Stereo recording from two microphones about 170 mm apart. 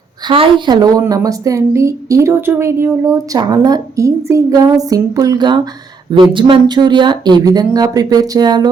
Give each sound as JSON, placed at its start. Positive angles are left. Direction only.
{"t": 0.3, "sound": "a woman's voice", "side_deg": -30}